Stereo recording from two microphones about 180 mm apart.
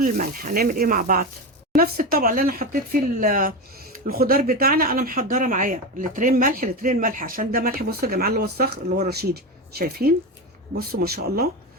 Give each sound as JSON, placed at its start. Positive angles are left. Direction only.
{"t": 0.0, "sound": "speech", "side_deg": -50}